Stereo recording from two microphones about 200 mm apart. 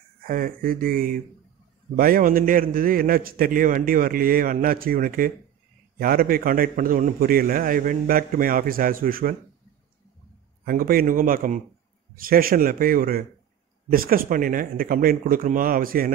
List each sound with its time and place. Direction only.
0.3 s a man's voice: 45° right (ahead or behind)
10.6 s a man's voice: 45° right (ahead or behind)